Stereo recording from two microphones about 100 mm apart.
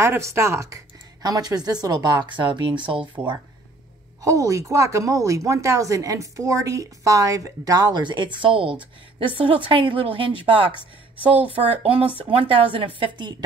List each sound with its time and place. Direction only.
0.0 s a woman's voice: 30° right (ahead or behind); by 3.3 s 65° right (ahead or behind)
4.2 s a woman's voice: 35° right (ahead or behind); by 13.3 s 60° right (ahead or behind)